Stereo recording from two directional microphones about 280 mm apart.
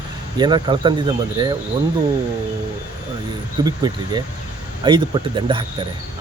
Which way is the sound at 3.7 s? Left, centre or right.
Centre.